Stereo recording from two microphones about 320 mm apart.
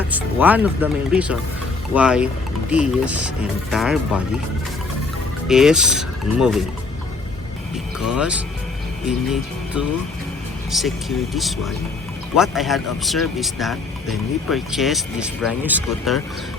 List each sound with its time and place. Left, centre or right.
0.1 s speech: centre
5.5 s speech: centre
7.9 s speech: centre
9.0 s music: centre
10.7 s speech: centre